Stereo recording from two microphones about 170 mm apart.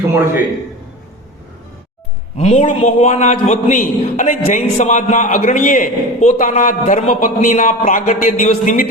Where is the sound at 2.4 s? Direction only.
40° left (ahead or behind).